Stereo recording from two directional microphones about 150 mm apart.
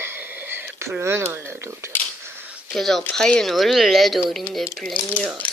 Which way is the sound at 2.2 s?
10° right (ahead or behind).